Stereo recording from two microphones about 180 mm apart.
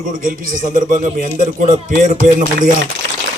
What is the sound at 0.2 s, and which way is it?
A man's voice, 50° right (ahead or behind).